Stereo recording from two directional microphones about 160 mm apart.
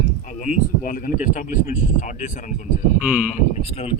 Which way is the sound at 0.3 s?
55° left (ahead or behind).